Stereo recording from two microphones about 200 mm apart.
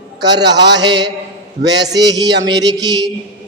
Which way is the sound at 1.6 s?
60° right (ahead or behind).